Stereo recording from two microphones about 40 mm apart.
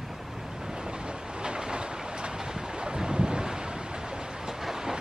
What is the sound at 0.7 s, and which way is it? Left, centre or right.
Train, centre.